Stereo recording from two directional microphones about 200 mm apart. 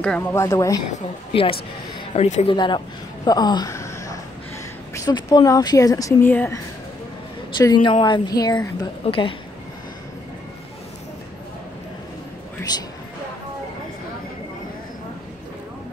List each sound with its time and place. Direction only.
0.0 s speech: 10° left (ahead or behind)
1.3 s a woman's voice: 25° left (ahead or behind)
2.5 s a woman's voice: 25° left (ahead or behind)
3.3 s a sound: 20° left (ahead or behind)
4.9 s speech: 20° left (ahead or behind)
7.5 s a woman's voice: 25° left (ahead or behind)